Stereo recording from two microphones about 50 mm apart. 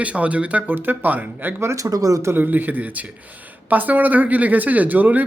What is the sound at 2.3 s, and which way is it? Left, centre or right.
Speech, right.